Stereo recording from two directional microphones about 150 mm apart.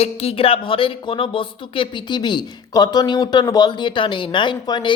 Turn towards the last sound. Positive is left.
turn(degrees=30)  # may be behind; listen again after turning